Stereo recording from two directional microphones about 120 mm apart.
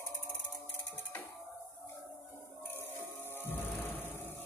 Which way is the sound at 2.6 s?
15° left (ahead or behind).